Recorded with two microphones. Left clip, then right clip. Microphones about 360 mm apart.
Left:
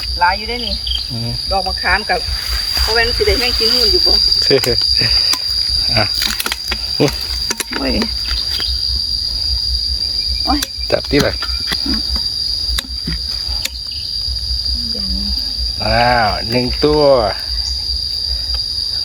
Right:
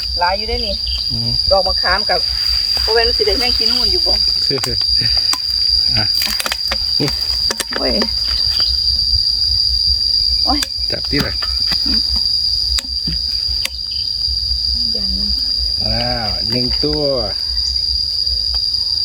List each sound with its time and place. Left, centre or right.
1.5 s speech: centre
4.4 s cricket: centre
10.4 s speech: centre
15.9 s speech: centre